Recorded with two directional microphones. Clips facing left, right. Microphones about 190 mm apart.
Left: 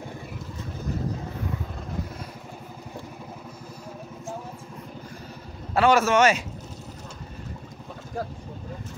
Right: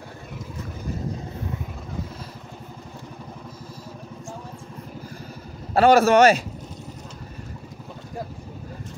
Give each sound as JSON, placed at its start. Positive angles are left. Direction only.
{"t": 5.8, "sound": "speech", "side_deg": -35}